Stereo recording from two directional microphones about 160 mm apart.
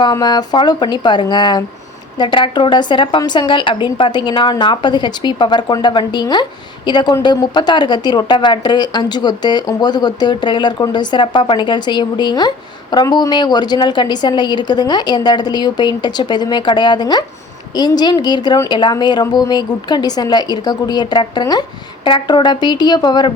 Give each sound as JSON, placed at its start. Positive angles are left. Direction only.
{"t": 0.0, "sound": "a woman's voice", "side_deg": 25}